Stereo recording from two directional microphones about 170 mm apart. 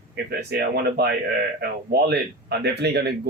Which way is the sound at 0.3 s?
75° right (ahead or behind).